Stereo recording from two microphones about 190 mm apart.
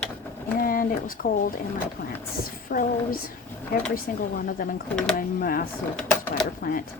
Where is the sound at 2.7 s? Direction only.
50° left (ahead or behind).